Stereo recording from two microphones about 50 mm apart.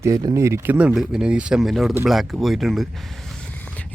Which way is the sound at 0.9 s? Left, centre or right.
Centre.